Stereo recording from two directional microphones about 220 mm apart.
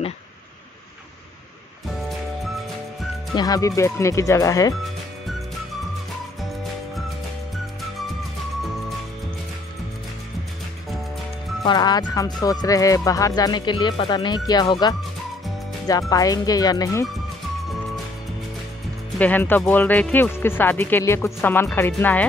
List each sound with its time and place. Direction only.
3.3 s speech: 15° left (ahead or behind)
11.6 s speech: 20° left (ahead or behind)
19.1 s speech: 5° left (ahead or behind)